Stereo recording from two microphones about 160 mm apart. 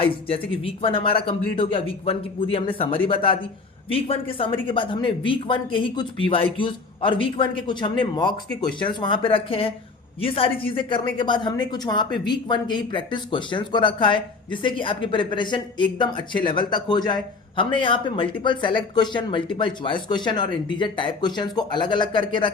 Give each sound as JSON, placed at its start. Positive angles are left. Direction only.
{"t": 0.0, "sound": "a woman's voice", "side_deg": 35}